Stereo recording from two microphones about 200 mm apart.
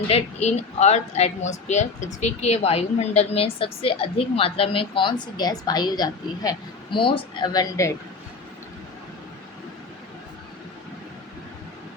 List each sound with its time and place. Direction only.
0.1 s speech: 35° left (ahead or behind); by 7.9 s 15° left (ahead or behind)